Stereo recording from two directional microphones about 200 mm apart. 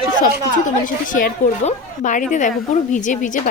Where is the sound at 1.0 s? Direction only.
40° left (ahead or behind).